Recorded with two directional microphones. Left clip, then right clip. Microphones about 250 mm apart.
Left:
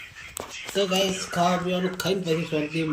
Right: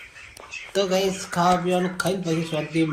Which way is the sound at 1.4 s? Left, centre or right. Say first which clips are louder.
Right 4 dB; centre.